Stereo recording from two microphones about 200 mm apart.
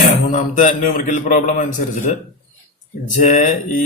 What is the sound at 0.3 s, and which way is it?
A man's voice, 35° left (ahead or behind).